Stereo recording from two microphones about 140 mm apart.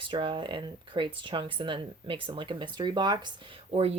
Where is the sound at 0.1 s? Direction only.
35° right (ahead or behind).